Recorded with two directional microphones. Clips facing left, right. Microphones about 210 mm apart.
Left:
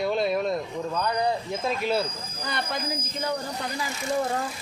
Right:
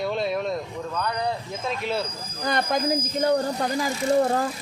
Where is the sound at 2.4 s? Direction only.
45° right (ahead or behind).